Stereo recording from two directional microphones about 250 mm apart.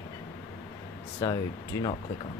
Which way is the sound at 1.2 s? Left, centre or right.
Centre.